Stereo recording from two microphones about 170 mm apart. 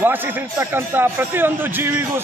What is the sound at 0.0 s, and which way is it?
A man's voice, 10° right (ahead or behind).